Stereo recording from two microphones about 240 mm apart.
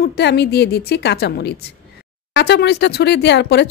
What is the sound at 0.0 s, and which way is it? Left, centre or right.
Speech, left.